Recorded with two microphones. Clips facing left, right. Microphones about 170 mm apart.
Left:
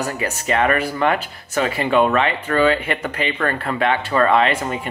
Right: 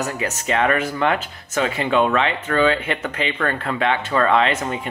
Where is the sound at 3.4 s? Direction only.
35° left (ahead or behind).